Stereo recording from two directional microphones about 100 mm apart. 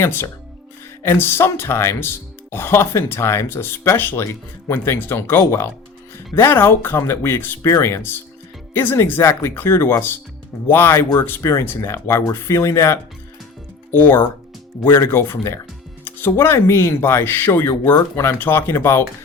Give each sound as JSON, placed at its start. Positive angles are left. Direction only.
{"t": 0.0, "sound": "speech", "side_deg": 25}